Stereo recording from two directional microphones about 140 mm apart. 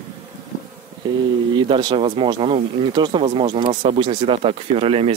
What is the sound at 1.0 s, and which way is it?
Speech, 30° right (ahead or behind).